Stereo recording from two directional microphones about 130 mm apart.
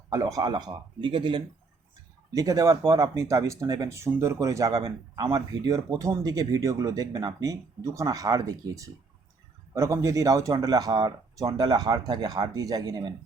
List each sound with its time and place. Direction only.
0.1 s speech: 30° right (ahead or behind)
2.3 s speech: 25° right (ahead or behind)